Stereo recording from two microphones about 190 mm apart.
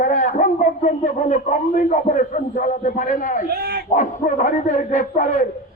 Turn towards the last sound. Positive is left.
turn(degrees=40)  # may be behind; listen again after turning